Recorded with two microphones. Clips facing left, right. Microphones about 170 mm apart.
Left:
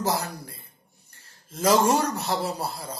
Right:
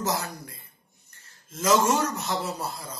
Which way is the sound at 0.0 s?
30° left (ahead or behind).